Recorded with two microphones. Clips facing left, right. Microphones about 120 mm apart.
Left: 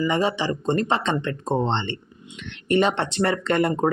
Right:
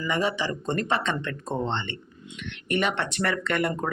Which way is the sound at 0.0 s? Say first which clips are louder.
Left 4 dB; 25° left (ahead or behind).